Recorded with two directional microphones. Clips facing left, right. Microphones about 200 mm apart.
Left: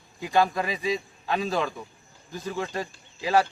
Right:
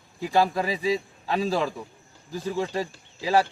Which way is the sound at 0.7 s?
30° right (ahead or behind).